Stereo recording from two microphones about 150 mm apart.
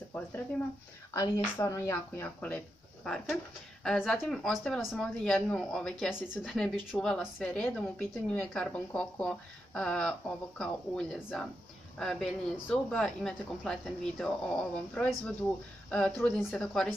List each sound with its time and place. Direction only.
1.1 s speech: 20° left (ahead or behind)
2.2 s a woman's voice: 10° left (ahead or behind)